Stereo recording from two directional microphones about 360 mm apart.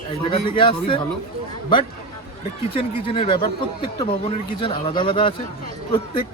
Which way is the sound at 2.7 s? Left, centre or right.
Centre.